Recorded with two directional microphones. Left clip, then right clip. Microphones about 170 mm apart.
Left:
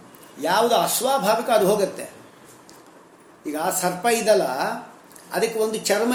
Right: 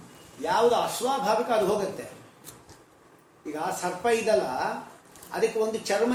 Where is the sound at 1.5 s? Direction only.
50° left (ahead or behind).